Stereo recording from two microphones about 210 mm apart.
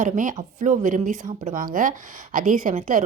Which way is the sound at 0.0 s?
40° right (ahead or behind).